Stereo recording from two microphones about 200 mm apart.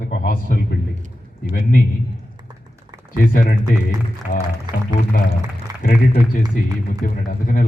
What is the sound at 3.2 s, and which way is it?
Speech, 45° left (ahead or behind).